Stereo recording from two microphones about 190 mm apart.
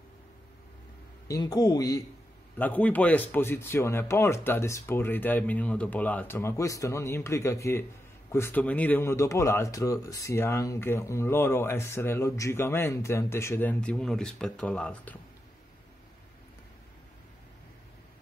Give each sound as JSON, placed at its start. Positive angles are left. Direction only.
{"t": 1.2, "sound": "a man's voice", "side_deg": 20}
{"t": 2.6, "sound": "speech", "side_deg": 10}